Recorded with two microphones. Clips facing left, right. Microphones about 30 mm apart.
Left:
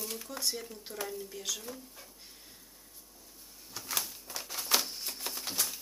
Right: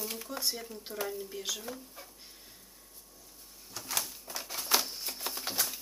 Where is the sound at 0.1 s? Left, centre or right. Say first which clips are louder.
Right 1 dB; centre.